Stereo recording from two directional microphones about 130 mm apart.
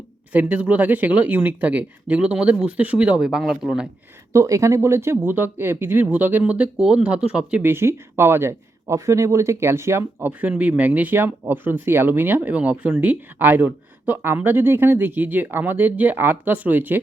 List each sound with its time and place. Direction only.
0.3 s speech: 10° right (ahead or behind)
4.3 s speech: 25° right (ahead or behind)